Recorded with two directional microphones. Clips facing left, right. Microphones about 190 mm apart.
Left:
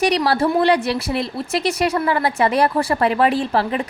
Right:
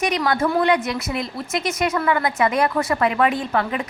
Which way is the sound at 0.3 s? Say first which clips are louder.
Even; 35° left (ahead or behind).